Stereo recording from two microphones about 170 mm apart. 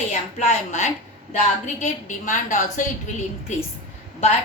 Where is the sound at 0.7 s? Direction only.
45° left (ahead or behind).